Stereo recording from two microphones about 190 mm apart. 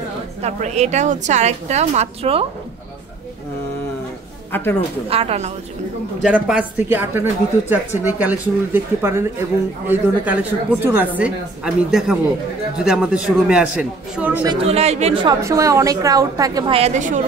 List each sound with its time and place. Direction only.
0.4 s a woman's voice: 35° right (ahead or behind)
4.5 s a man's voice: 10° left (ahead or behind)
5.1 s a woman's voice: 30° right (ahead or behind)
6.2 s a man's voice: 5° right (ahead or behind)
14.5 s a woman's voice: 30° right (ahead or behind)
15.4 s speech: 15° right (ahead or behind)
16.7 s a woman's voice: 35° right (ahead or behind)